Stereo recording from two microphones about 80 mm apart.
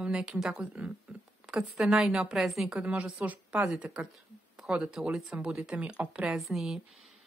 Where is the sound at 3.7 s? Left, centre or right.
Centre.